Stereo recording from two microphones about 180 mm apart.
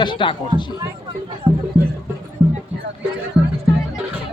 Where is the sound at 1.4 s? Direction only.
15° right (ahead or behind).